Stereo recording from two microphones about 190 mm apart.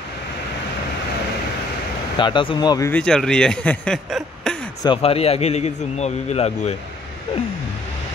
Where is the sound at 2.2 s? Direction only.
25° left (ahead or behind).